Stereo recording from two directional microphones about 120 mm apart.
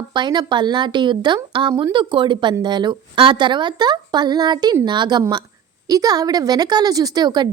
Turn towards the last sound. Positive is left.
turn(degrees=-35)  # may be behind; listen again after turning